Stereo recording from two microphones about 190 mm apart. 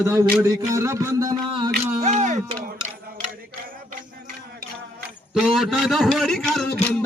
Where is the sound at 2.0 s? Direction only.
35° right (ahead or behind).